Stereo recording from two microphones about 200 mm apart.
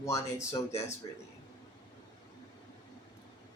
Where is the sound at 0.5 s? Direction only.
15° left (ahead or behind).